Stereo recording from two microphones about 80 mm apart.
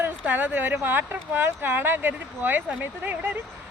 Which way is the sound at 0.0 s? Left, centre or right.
Right.